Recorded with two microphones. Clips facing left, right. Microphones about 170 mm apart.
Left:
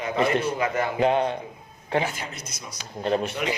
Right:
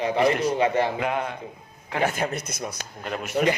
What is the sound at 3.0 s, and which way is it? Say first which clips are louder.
Speech: left 6 dB; 30° left (ahead or behind).